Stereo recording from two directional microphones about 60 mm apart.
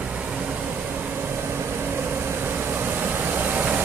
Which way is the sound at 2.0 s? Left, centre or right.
Right.